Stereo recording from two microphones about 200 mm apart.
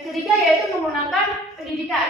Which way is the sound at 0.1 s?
Centre (ahead or behind).